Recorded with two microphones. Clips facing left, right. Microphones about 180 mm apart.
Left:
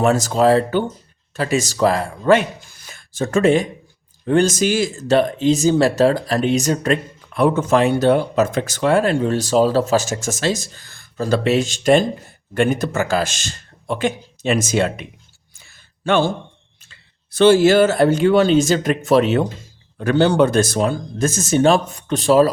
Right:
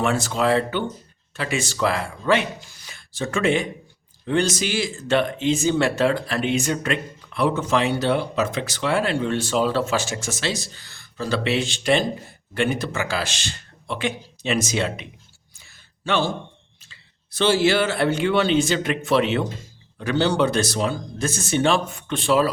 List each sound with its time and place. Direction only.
0.0 s speech: 40° left (ahead or behind)
15.5 s a sound: 50° left (ahead or behind)
16.9 s speech: 50° left (ahead or behind)